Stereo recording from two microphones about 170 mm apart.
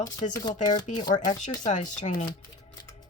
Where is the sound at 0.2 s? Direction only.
35° left (ahead or behind).